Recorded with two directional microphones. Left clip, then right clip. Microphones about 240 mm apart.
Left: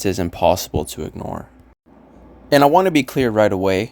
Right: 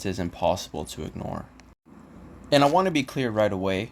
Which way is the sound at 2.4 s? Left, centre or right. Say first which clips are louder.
Left 7 dB; left.